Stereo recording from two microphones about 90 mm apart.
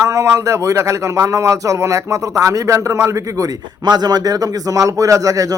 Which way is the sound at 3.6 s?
50° right (ahead or behind).